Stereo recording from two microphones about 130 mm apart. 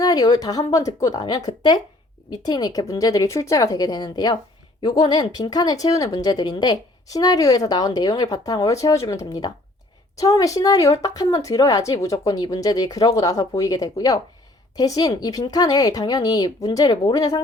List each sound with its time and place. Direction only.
0.0 s speech: 30° left (ahead or behind)